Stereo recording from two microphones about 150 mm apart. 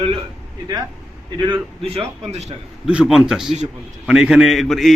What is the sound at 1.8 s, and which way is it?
Speech, 45° right (ahead or behind).